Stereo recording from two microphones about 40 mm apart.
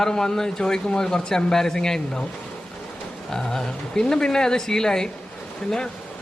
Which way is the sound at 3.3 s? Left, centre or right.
Centre.